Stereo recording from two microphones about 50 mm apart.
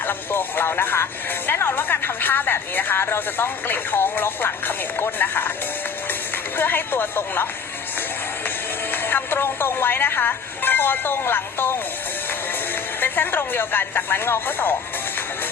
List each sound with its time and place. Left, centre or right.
0.0 s speech: left
6.1 s music: left
8.4 s speech: left